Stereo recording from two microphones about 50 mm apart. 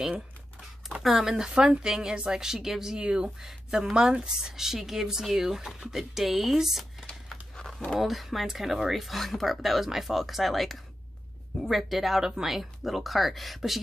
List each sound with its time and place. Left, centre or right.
1.0 s speech: centre
3.0 s speech: right
3.3 s speech: centre